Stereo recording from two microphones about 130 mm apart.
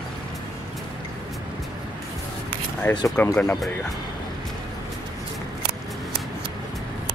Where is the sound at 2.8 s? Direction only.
15° left (ahead or behind).